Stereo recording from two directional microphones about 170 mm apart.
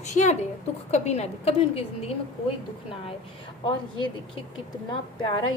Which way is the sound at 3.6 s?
25° left (ahead or behind).